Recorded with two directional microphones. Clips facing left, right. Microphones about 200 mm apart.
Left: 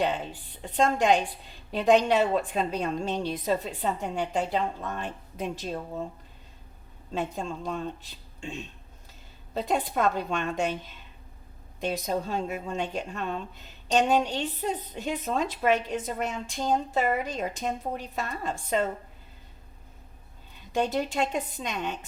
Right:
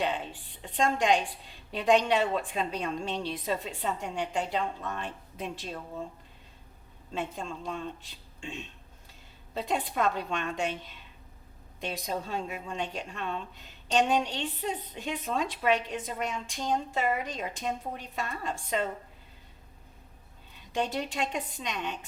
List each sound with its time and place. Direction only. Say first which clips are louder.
0.6 s a woman's voice: left 3 dB; 40° left (ahead or behind)
7.1 s a woman's voice: left 4 dB; 40° left (ahead or behind)
11.8 s a woman's voice: left 5 dB; 45° left (ahead or behind)
20.7 s a woman's voice: left 4 dB; 45° left (ahead or behind)